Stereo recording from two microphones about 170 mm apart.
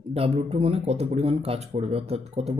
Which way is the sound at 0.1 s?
35° right (ahead or behind).